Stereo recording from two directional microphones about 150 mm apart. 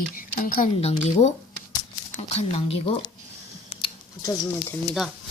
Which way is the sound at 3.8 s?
30° left (ahead or behind).